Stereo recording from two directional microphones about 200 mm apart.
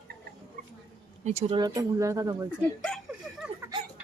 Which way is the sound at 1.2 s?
30° right (ahead or behind).